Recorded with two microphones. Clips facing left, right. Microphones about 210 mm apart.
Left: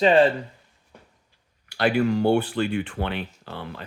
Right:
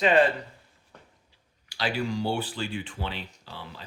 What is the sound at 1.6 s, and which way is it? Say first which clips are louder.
Speech: left 8 dB; 60° left (ahead or behind).